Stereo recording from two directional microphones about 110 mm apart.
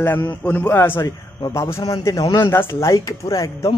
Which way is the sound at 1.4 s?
35° left (ahead or behind).